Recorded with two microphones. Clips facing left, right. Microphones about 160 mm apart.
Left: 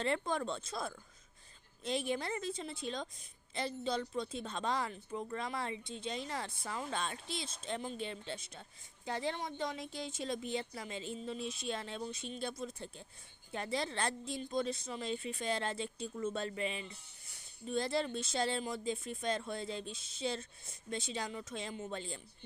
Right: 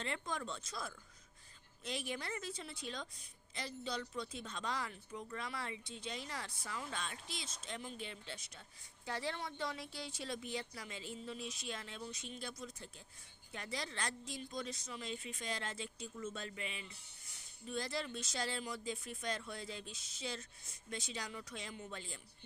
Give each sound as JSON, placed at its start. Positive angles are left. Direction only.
{"t": 0.0, "sound": "speech", "side_deg": 35}
{"t": 1.8, "sound": "speech", "side_deg": 25}